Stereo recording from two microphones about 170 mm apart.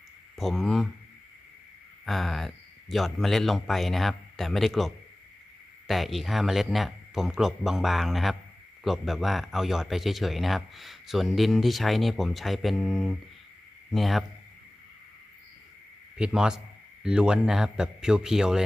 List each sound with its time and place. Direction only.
0.3 s speech: centre (ahead or behind)
2.0 s a sound: centre (ahead or behind)
2.9 s speech: centre (ahead or behind)
5.9 s speech: centre (ahead or behind)
16.1 s speech: 5° right (ahead or behind)